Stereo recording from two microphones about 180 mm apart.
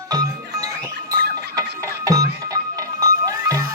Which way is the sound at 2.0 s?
20° right (ahead or behind).